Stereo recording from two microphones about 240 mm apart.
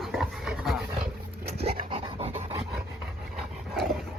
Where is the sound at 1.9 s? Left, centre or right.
Right.